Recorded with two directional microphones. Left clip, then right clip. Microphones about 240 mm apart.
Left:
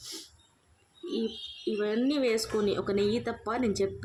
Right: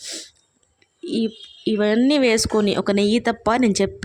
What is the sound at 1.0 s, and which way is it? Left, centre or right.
Speech, right.